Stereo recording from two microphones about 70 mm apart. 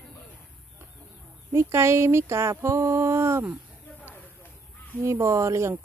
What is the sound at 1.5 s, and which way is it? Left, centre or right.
Speech, right.